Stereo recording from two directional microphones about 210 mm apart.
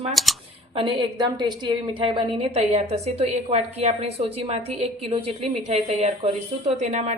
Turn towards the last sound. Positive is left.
turn(degrees=-35)  # may be behind; listen again after turning